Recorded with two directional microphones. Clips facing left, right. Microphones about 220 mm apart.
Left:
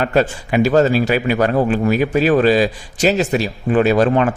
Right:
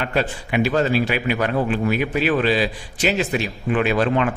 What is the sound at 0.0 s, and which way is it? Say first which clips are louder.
A man's voice: left 6 dB; 40° left (ahead or behind).